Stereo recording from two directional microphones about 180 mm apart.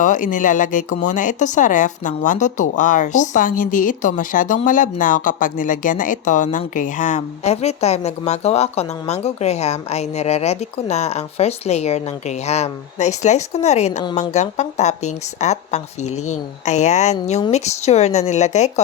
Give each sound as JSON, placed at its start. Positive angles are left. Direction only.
{"t": 0.0, "sound": "a woman's voice", "side_deg": 45}